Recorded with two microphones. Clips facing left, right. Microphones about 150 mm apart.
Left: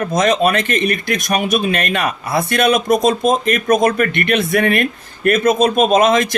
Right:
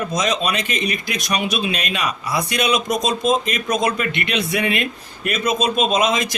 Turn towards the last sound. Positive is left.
turn(degrees=55)  # may be behind; listen again after turning